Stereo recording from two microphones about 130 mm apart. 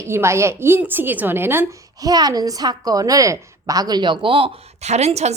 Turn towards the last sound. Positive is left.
turn(degrees=-55)  # may be behind; listen again after turning